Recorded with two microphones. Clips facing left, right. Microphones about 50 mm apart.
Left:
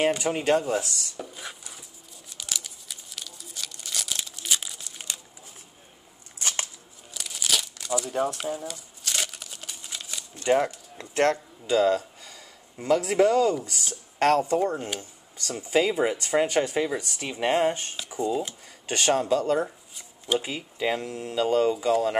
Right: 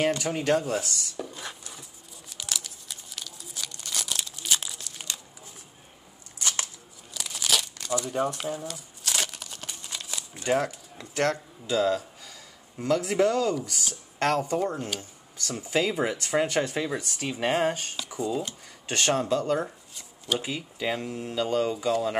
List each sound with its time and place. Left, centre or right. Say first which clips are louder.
0.0 s speech: left 2 dB; centre
0.6 s chopping: left 2 dB; centre
2.4 s crumpling: even; centre
7.2 s crumpling: right 1 dB; centre
11.0 s speech: left 3 dB; left
11.7 s speech: left 3 dB; centre
21.0 s speech: left 2 dB; centre